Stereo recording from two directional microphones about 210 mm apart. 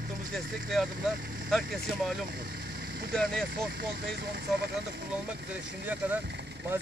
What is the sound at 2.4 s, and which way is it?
Vehicle, 50° right (ahead or behind).